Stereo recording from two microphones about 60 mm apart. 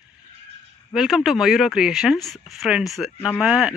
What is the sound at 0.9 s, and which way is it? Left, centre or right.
Speech, centre.